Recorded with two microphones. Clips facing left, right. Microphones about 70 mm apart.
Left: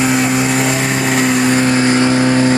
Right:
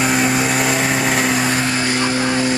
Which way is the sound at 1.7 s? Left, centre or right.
Left.